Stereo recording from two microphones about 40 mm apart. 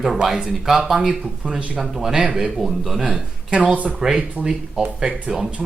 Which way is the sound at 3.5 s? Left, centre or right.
Right.